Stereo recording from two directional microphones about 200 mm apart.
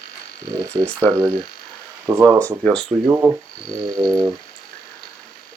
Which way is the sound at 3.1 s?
10° right (ahead or behind).